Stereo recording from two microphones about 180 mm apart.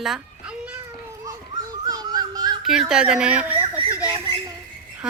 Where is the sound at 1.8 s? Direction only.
20° right (ahead or behind).